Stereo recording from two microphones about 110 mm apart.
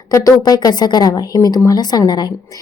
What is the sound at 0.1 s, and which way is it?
A woman's voice, 35° left (ahead or behind).